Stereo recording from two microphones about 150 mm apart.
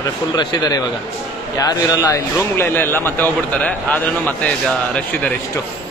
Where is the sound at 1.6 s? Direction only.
25° left (ahead or behind); by 5.3 s 10° left (ahead or behind).